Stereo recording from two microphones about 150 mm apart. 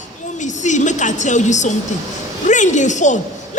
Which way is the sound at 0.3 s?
55° left (ahead or behind).